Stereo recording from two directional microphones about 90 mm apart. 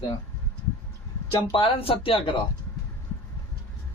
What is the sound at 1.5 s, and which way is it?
Speech, 90° left.